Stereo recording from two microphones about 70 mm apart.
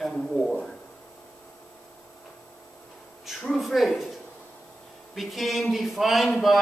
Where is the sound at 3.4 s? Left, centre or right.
Centre.